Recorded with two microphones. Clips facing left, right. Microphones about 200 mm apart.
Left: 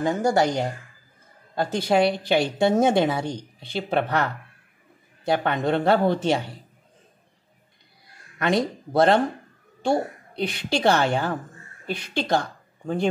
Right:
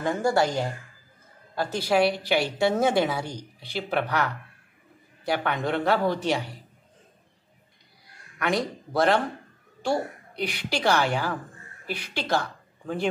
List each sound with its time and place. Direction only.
0.0 s speech: 20° left (ahead or behind)
8.4 s speech: 25° left (ahead or behind)